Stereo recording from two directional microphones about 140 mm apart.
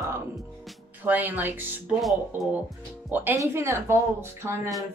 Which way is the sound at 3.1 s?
15° right (ahead or behind).